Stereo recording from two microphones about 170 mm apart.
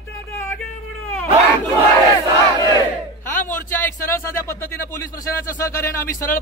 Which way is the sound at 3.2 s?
15° left (ahead or behind).